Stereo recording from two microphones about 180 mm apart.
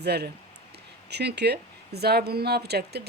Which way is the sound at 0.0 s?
65° right (ahead or behind).